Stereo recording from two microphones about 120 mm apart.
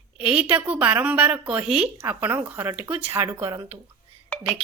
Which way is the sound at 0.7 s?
15° right (ahead or behind).